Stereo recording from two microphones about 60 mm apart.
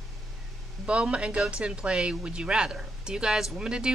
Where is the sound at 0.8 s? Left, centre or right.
Centre.